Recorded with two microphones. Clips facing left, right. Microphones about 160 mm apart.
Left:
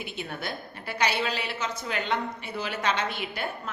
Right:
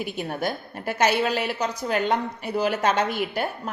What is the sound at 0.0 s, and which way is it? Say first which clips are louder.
A woman's voice: right 7 dB; 40° right (ahead or behind).